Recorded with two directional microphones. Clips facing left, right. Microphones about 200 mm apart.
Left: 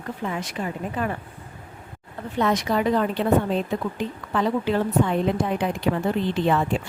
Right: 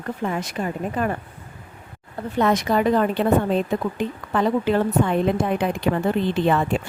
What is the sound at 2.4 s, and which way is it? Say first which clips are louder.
A woman's voice: right 3 dB; 50° right (ahead or behind).